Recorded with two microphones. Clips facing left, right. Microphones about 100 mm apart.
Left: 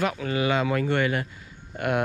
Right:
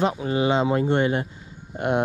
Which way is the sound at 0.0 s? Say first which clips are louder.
Right 3 dB; 25° right (ahead or behind).